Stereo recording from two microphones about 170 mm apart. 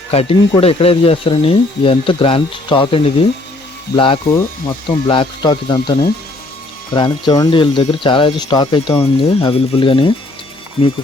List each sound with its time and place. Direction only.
0.1 s speech: 35° left (ahead or behind)